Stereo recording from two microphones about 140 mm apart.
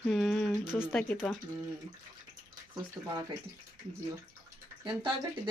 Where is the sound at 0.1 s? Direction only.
Centre (ahead or behind).